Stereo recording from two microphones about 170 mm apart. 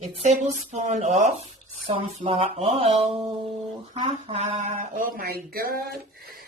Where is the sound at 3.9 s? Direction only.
35° right (ahead or behind); by 6.5 s 60° right (ahead or behind).